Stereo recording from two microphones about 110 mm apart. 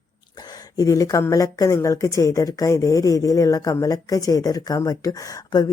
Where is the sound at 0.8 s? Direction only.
30° left (ahead or behind).